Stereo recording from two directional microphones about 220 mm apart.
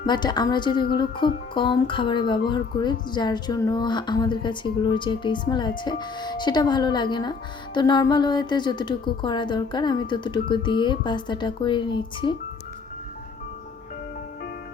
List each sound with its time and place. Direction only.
0.0 s speech: 20° left (ahead or behind)